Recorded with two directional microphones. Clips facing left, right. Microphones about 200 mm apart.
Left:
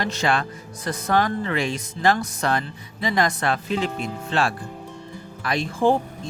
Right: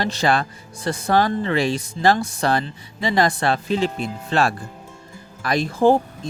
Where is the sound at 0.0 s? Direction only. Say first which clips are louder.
Right 3 dB; 35° right (ahead or behind).